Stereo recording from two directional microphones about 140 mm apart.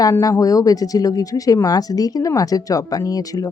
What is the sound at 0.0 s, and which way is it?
Speech, 25° left (ahead or behind).